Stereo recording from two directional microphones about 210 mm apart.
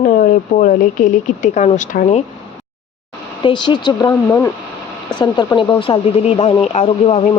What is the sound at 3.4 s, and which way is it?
Speech, 20° left (ahead or behind).